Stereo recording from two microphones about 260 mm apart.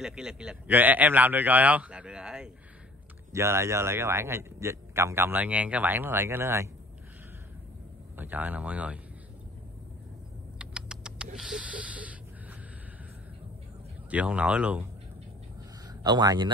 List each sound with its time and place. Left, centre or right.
0.0 s a man's voice: centre
8.2 s a man's voice: centre
10.6 s a sound: centre
11.3 s snort: centre
14.1 s a man's voice: centre
15.9 s speech: centre